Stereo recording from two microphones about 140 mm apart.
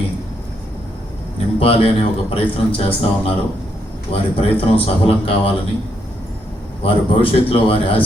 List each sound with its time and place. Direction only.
1.5 s a man's voice: 45° left (ahead or behind)
6.8 s a man's voice: 40° left (ahead or behind)